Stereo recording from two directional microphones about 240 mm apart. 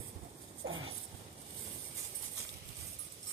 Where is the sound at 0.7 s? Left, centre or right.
Right.